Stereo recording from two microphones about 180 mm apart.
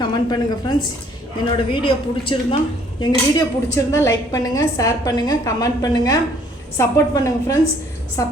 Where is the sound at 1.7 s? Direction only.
30° left (ahead or behind).